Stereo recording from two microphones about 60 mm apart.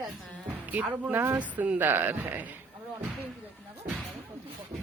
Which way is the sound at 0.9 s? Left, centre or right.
Right.